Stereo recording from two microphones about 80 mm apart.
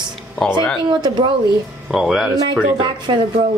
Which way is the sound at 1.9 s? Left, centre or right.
Centre.